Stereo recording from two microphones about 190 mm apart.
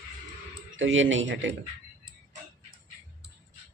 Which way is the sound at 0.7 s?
85° right.